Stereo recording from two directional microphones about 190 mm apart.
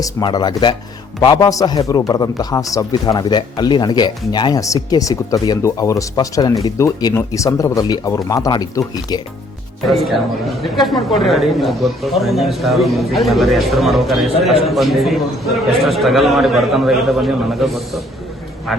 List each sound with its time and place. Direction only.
0.0 s speech: 20° left (ahead or behind)
9.8 s speech: centre (ahead or behind)